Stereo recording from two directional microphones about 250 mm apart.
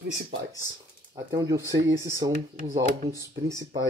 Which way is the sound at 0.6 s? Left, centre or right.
Centre.